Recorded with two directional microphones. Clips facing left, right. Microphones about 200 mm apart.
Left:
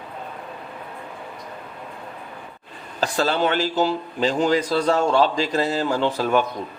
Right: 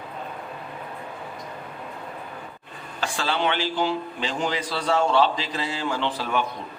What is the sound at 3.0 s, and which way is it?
A man's voice, 40° left (ahead or behind).